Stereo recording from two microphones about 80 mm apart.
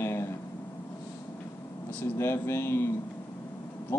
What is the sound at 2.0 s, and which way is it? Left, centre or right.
Speech, left.